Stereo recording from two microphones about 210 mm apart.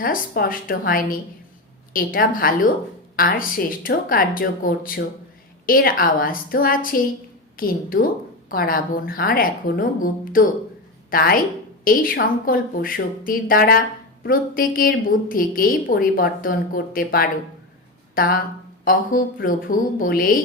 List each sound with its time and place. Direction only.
0.0 s a woman's voice: 40° left (ahead or behind)